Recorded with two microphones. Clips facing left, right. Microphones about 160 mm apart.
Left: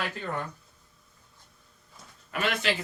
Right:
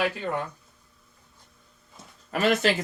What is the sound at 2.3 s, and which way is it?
Speech, 40° right (ahead or behind).